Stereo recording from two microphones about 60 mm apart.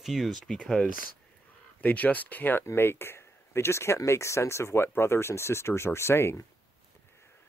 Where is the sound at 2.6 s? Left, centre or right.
Left.